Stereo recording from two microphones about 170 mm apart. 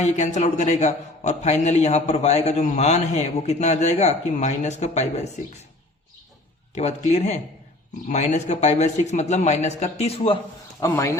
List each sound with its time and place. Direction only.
0.0 s a man's voice: 45° left (ahead or behind)
6.7 s a man's voice: 40° left (ahead or behind)
10.8 s speech: 20° left (ahead or behind)